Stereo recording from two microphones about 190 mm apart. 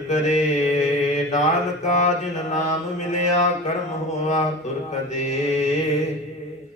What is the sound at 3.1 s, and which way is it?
Mantra, 40° left (ahead or behind).